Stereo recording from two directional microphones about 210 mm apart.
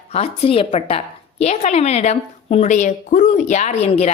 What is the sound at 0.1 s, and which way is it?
A woman's voice, 25° left (ahead or behind).